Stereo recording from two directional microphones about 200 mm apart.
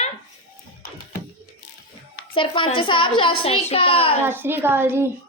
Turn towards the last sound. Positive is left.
turn(degrees=-10)  # may be behind; listen again after turning